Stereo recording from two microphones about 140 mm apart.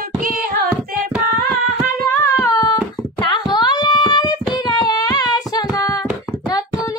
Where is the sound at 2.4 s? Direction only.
25° left (ahead or behind).